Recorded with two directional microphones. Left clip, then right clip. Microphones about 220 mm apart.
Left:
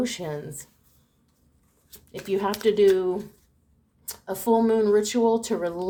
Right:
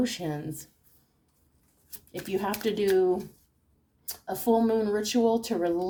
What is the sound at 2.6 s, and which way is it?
A woman's voice, 35° left (ahead or behind).